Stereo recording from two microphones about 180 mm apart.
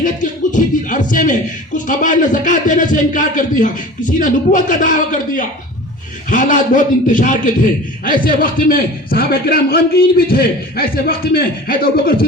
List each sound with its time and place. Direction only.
0.0 s a man's voice: 45° left (ahead or behind)